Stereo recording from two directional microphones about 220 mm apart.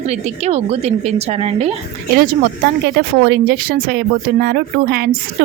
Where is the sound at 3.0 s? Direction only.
45° right (ahead or behind).